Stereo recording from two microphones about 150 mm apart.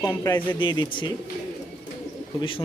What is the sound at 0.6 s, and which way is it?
Speech, 30° left (ahead or behind).